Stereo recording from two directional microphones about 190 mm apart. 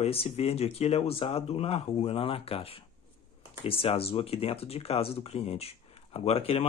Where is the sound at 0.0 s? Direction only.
30° left (ahead or behind).